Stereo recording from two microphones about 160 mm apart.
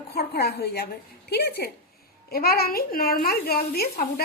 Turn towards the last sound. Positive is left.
turn(degrees=70)  # may be behind; listen again after turning